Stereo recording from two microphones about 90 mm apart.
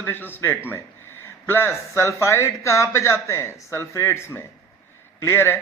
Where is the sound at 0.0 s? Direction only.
20° left (ahead or behind).